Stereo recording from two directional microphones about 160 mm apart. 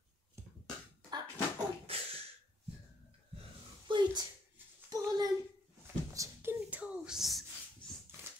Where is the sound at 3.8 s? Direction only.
30° right (ahead or behind); by 7.4 s centre (ahead or behind).